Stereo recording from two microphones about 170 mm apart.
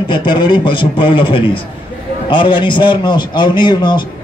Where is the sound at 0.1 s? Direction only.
25° left (ahead or behind).